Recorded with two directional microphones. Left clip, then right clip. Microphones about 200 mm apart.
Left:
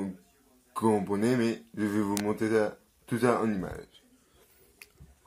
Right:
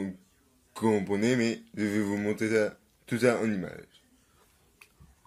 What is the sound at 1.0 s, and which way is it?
Speech, 20° right (ahead or behind).